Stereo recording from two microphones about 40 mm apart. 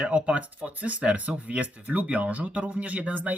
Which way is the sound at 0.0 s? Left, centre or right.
Right.